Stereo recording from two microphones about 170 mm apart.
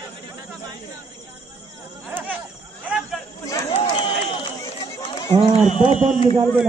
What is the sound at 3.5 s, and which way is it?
Run, 20° left (ahead or behind).